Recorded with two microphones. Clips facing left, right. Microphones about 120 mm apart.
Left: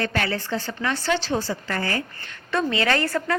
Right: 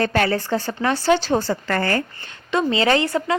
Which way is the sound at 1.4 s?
60° right (ahead or behind).